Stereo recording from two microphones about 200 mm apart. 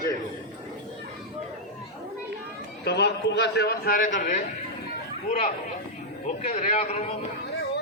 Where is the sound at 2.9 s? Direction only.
55° left (ahead or behind); by 7.0 s 30° left (ahead or behind).